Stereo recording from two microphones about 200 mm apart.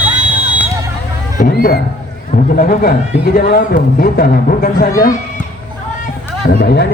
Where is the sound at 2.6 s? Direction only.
45° left (ahead or behind).